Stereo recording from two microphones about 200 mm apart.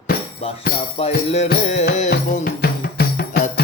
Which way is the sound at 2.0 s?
40° left (ahead or behind).